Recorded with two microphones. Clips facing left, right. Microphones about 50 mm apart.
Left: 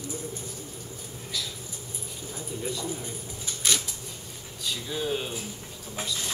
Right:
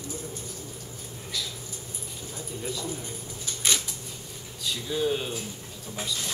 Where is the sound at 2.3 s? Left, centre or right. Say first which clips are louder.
Left 1 dB; centre.